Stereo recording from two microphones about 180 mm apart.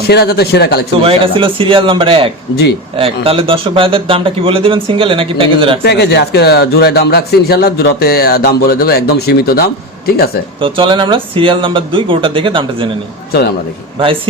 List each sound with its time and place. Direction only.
0.1 s speech: 60° left (ahead or behind)
0.9 s speech: 30° right (ahead or behind)
5.8 s speech: 65° left (ahead or behind)
10.6 s speech: 30° right (ahead or behind)